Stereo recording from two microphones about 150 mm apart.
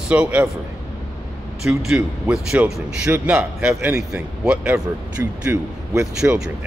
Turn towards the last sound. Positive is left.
turn(degrees=-15)  # may be behind; listen again after turning